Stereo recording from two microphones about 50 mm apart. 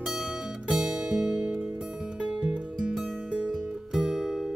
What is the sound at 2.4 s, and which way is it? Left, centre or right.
Music, centre.